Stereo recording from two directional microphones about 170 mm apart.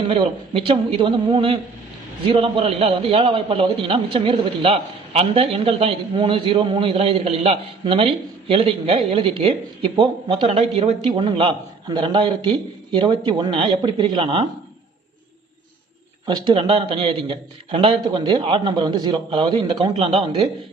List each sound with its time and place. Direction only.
0.1 s a man's voice: 30° right (ahead or behind)
16.2 s speech: 25° right (ahead or behind)